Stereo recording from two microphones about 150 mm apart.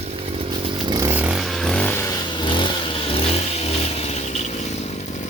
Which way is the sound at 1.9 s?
25° left (ahead or behind).